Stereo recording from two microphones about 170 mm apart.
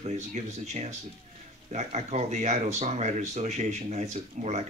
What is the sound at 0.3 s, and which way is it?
Speech, 45° right (ahead or behind).